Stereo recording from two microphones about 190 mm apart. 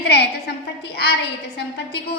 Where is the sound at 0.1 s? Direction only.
60° left (ahead or behind).